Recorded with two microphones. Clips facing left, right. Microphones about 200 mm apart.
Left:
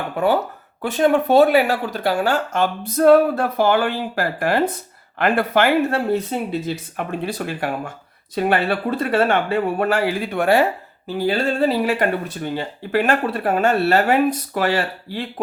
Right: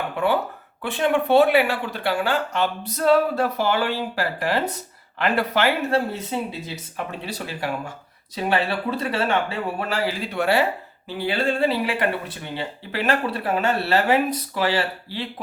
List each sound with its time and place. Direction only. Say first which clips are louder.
0.2 s speech: left 4 dB; 40° left (ahead or behind)